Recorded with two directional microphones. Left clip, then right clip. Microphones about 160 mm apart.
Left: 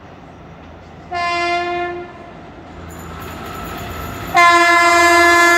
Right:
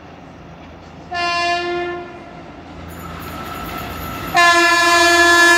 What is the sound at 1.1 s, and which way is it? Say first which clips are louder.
Train: even; 20° right (ahead or behind).